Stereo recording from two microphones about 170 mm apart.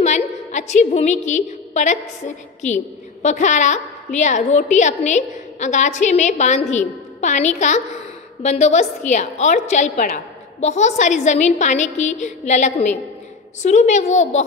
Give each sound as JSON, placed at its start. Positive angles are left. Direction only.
{"t": 0.0, "sound": "a woman's voice", "side_deg": 45}